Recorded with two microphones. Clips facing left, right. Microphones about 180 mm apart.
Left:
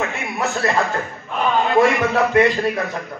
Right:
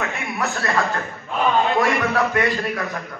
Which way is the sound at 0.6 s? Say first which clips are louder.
Left 2 dB; 25° left (ahead or behind).